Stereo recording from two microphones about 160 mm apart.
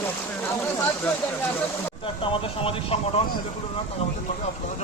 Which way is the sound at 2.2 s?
35° left (ahead or behind).